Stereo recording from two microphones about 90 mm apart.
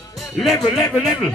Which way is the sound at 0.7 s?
Centre (ahead or behind).